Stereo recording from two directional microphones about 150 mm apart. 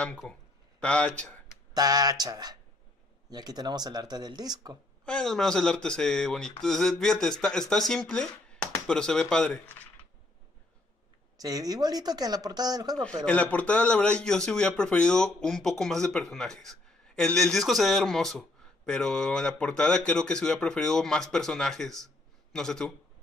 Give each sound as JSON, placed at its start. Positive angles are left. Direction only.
{"t": 0.0, "sound": "a sound", "side_deg": 5}
{"t": 1.7, "sound": "speech", "side_deg": -25}
{"t": 5.0, "sound": "speech", "side_deg": 5}
{"t": 11.3, "sound": "speech", "side_deg": -25}
{"t": 13.2, "sound": "a man's voice", "side_deg": 10}